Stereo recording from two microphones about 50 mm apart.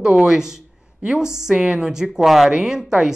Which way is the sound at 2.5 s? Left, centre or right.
Centre.